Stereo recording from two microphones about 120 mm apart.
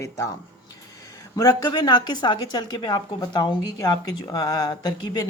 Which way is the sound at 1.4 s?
35° left (ahead or behind).